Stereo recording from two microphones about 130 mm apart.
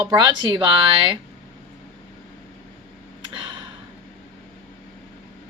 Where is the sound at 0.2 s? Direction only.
35° right (ahead or behind).